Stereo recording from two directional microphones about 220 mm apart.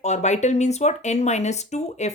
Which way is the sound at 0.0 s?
30° left (ahead or behind).